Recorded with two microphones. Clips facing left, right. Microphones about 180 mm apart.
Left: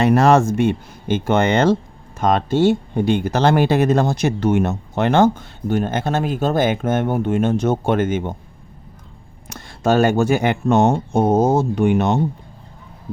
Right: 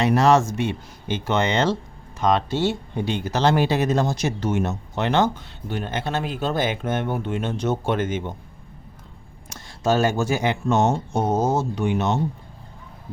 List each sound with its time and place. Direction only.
0.0 s speech: 55° left (ahead or behind)
9.5 s speech: 60° left (ahead or behind)